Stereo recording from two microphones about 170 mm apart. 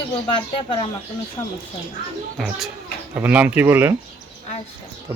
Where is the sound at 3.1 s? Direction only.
10° right (ahead or behind).